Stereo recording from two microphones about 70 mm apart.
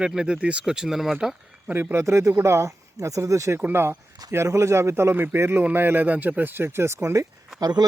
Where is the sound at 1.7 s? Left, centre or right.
Right.